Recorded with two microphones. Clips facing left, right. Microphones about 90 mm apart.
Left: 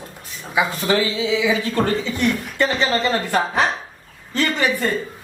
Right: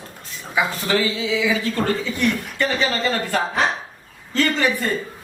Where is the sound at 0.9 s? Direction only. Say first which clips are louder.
Left 2 dB; 20° left (ahead or behind).